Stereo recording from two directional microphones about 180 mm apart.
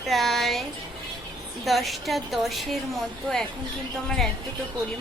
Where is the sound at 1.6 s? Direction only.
Centre (ahead or behind).